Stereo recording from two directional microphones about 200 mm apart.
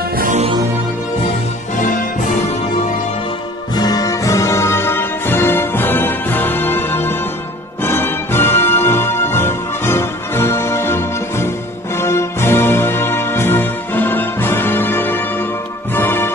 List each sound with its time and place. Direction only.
0.1 s music: 40° right (ahead or behind)
1.8 s music: 40° left (ahead or behind)
3.7 s music: 20° left (ahead or behind)